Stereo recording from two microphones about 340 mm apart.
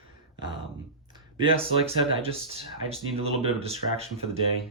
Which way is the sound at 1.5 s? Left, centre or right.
Centre.